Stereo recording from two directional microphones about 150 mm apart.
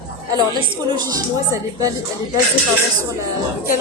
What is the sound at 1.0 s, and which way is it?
Speech, 25° right (ahead or behind).